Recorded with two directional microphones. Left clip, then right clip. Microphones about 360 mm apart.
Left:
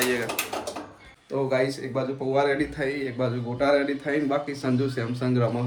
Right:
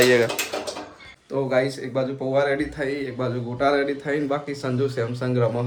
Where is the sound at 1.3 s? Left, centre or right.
Centre.